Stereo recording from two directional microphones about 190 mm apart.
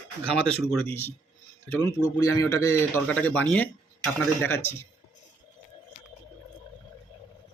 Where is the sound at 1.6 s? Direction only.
15° left (ahead or behind).